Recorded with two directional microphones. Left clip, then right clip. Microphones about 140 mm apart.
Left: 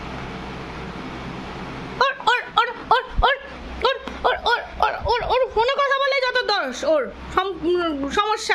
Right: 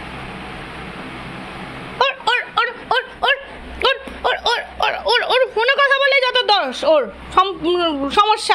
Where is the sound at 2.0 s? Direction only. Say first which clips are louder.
Right 2 dB; 10° left (ahead or behind).